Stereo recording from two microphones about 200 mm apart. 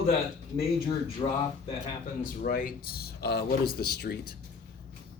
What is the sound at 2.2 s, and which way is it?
Speech, 45° left (ahead or behind).